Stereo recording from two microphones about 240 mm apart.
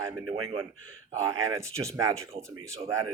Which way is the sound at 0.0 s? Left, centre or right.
Centre.